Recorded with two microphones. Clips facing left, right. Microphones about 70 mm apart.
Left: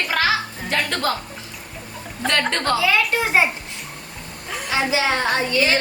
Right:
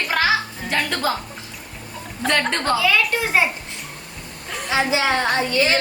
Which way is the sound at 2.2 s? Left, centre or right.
Centre.